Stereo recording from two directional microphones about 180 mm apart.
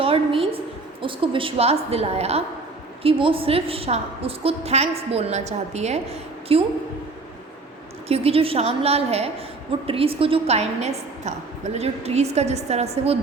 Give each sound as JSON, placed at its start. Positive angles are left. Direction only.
{"t": 0.0, "sound": "a sound", "side_deg": -30}
{"t": 1.0, "sound": "a woman's voice", "side_deg": -30}
{"t": 8.0, "sound": "a woman's voice", "side_deg": -35}